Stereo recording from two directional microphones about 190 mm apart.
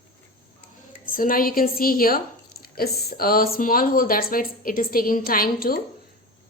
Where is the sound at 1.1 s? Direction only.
45° left (ahead or behind).